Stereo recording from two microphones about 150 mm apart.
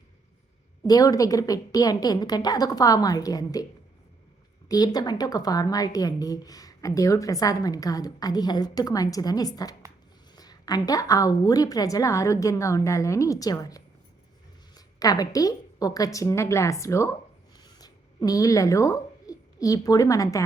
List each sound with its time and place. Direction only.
0.9 s a woman's voice: 25° left (ahead or behind)
4.7 s a woman's voice: 25° left (ahead or behind)
17.6 s a sound: 25° left (ahead or behind)